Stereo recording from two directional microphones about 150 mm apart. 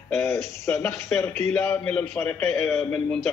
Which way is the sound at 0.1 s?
20° left (ahead or behind).